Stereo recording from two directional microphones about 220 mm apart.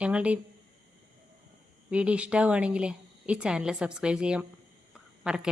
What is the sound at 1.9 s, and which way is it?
A woman's voice, 5° right (ahead or behind).